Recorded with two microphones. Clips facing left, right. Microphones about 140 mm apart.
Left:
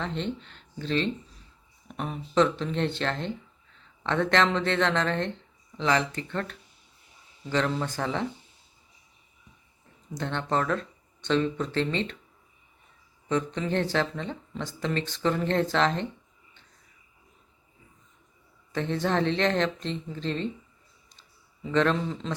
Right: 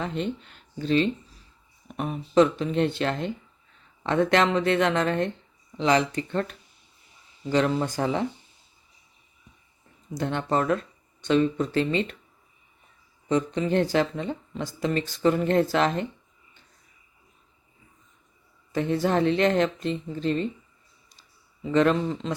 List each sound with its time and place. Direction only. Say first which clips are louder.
0.0 s speech: right 2 dB; 10° right (ahead or behind)
10.2 s speech: right 3 dB; 10° right (ahead or behind)
13.2 s speech: right 3 dB; 15° right (ahead or behind)
18.7 s speech: right 3 dB; 10° right (ahead or behind)
21.7 s speech: right 3 dB; 5° right (ahead or behind)